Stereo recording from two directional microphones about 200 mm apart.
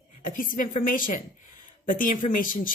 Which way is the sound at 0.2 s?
40° left (ahead or behind).